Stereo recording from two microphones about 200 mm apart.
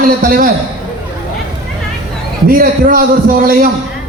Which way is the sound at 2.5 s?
45° right (ahead or behind).